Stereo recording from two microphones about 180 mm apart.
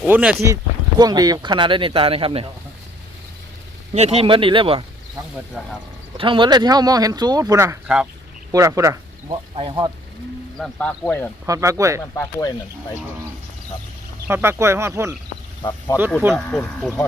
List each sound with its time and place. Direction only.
0.0 s speech: 5° right (ahead or behind)
0.5 s speech: 20° right (ahead or behind)
3.9 s speech: 35° right (ahead or behind)
6.1 s speech: 30° right (ahead or behind)
10.6 s speech: 5° left (ahead or behind)
11.4 s speech: 15° right (ahead or behind)
12.1 s speech: 15° left (ahead or behind)
14.3 s speech: 10° right (ahead or behind)
15.6 s speech: 25° left (ahead or behind)
16.2 s speech: 10° right (ahead or behind)